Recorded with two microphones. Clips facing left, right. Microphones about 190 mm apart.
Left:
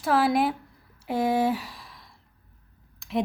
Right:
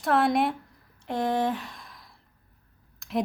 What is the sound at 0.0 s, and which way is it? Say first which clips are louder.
A woman's voice: left 1 dB; centre (ahead or behind).